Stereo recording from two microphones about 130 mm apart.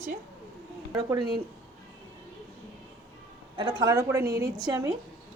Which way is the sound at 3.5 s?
35° right (ahead or behind).